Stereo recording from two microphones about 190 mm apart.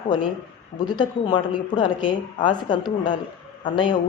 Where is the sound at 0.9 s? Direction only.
25° left (ahead or behind).